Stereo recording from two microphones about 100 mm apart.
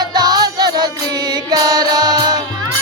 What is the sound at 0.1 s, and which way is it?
Music, 45° right (ahead or behind).